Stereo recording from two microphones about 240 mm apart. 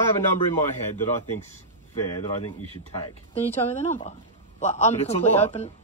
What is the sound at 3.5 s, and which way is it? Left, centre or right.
A man's voice, left.